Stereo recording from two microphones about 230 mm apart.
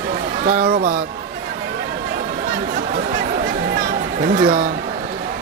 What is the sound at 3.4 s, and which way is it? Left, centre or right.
Chatter, right.